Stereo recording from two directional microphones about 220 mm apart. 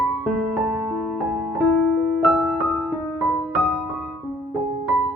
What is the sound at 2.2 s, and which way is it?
Music, 5° right (ahead or behind).